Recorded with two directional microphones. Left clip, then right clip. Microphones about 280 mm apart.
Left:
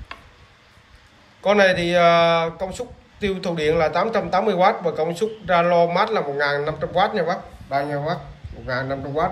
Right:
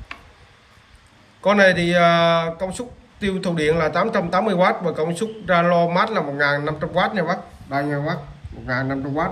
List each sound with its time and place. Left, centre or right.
1.4 s speech: centre